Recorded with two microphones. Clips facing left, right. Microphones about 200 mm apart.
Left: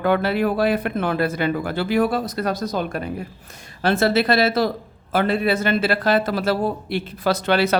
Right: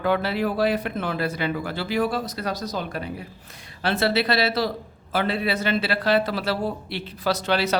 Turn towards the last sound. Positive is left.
turn(degrees=55)  # may be behind; listen again after turning